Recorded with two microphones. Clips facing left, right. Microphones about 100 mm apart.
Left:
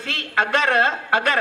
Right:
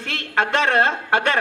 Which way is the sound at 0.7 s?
30° right (ahead or behind).